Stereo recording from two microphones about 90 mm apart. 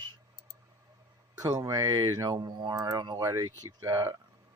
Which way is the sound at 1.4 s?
40° right (ahead or behind).